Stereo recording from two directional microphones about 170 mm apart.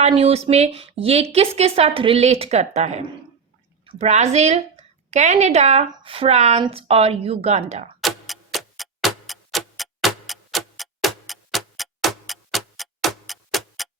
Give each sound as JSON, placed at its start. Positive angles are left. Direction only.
{"t": 0.0, "sound": "a woman's voice", "side_deg": -35}
{"t": 8.0, "sound": "tick-tock", "side_deg": 0}